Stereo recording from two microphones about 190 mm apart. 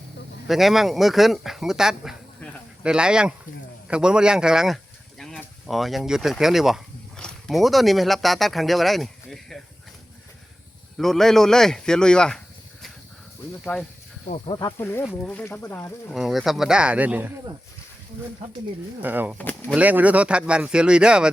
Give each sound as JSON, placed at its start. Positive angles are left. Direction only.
{"t": 0.4, "sound": "speech", "side_deg": 0}
{"t": 10.9, "sound": "speech", "side_deg": 0}
{"t": 14.3, "sound": "speech", "side_deg": 30}
{"t": 14.6, "sound": "speech", "side_deg": 15}
{"t": 16.1, "sound": "speech", "side_deg": 0}
{"t": 19.0, "sound": "speech", "side_deg": -10}
{"t": 19.4, "sound": "speech", "side_deg": 10}
{"t": 19.7, "sound": "speech", "side_deg": -10}